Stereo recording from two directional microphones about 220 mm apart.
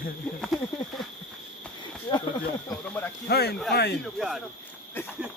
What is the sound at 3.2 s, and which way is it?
Speech, 45° left (ahead or behind).